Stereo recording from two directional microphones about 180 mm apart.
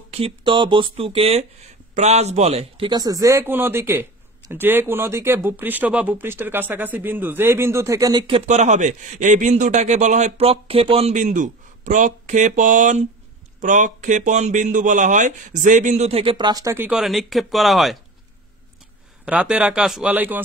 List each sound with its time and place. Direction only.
0.1 s a man's voice: 30° right (ahead or behind)
3.0 s speech: 20° right (ahead or behind)
8.3 s a man's voice: 35° right (ahead or behind); by 17.9 s centre (ahead or behind)
19.2 s speech: 5° right (ahead or behind)